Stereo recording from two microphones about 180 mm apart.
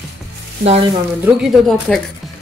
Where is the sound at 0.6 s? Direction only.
35° right (ahead or behind).